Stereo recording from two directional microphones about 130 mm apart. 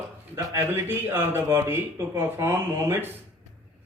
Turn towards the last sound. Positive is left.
turn(degrees=-20)  # may be behind; listen again after turning